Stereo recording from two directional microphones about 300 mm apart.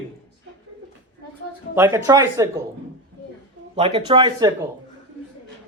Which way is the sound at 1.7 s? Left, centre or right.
Centre.